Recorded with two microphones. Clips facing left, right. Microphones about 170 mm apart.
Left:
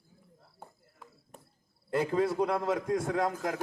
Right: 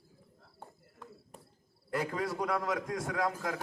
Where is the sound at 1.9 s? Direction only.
25° left (ahead or behind).